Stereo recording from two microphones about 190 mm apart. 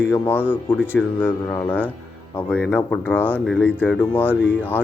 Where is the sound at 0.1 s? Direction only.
10° left (ahead or behind).